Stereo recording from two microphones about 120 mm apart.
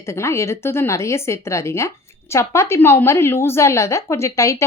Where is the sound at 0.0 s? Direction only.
25° left (ahead or behind).